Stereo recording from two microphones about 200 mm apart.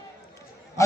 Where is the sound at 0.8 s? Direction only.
15° left (ahead or behind).